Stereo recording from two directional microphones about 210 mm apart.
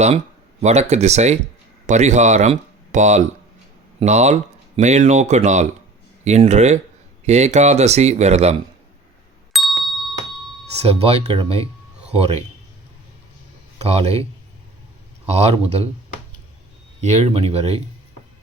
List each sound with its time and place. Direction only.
0.6 s speech: 30° right (ahead or behind)
9.5 s ding: centre (ahead or behind)
10.8 s speech: 30° right (ahead or behind)
13.8 s speech: 30° right (ahead or behind)
15.3 s speech: 30° right (ahead or behind)
17.0 s speech: 30° right (ahead or behind)